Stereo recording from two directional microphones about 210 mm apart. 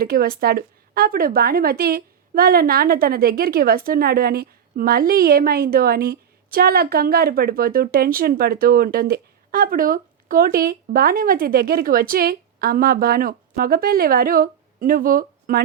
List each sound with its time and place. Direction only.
0.0 s speech: 45° right (ahead or behind)